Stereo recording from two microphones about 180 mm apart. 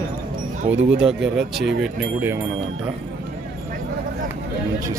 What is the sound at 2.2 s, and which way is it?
Speech, 10° right (ahead or behind).